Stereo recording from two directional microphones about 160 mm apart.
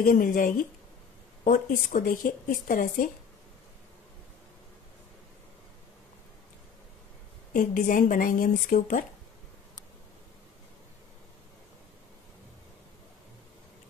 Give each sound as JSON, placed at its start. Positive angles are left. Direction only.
{"t": 0.0, "sound": "speech", "side_deg": 60}
{"t": 1.7, "sound": "speech", "side_deg": 60}
{"t": 7.5, "sound": "speech", "side_deg": 55}